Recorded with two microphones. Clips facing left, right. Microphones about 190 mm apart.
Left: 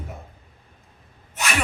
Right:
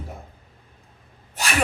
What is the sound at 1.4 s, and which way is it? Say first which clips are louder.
Sneeze: left 1 dB; 35° right (ahead or behind).